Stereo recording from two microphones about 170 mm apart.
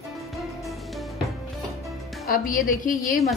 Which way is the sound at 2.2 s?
55° left (ahead or behind).